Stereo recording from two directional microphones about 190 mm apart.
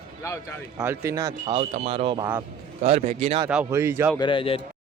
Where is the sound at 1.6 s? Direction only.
30° right (ahead or behind).